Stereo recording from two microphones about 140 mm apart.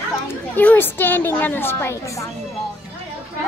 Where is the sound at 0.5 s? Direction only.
15° left (ahead or behind).